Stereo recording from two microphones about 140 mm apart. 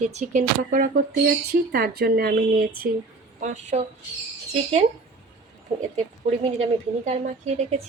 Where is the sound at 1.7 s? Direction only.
90° right.